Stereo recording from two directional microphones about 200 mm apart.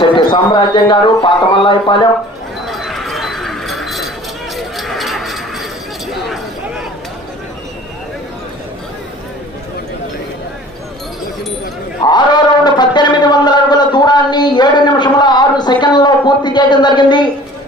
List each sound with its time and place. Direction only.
0.0 s speech: 25° left (ahead or behind)
2.6 s chink: centre (ahead or behind)
4.5 s a sound: centre (ahead or behind)
12.0 s music: 20° left (ahead or behind)